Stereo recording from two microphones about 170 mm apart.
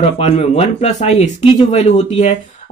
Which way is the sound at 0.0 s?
35° left (ahead or behind).